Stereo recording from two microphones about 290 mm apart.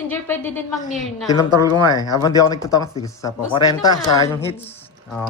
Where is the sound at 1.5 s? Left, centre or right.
Centre.